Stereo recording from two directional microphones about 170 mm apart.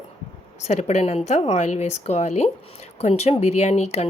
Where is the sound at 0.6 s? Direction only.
40° left (ahead or behind).